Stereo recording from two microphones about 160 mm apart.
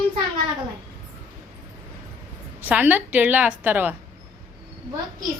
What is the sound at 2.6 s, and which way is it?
A woman's voice, 10° right (ahead or behind).